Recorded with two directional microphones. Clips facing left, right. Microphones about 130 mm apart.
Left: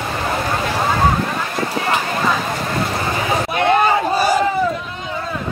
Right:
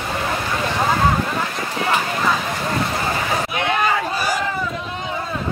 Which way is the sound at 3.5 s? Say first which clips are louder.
Left 7 dB; 35° left (ahead or behind).